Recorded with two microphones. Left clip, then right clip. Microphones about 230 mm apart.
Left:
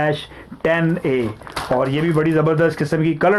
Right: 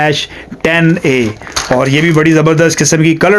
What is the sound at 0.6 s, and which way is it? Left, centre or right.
Speech, right.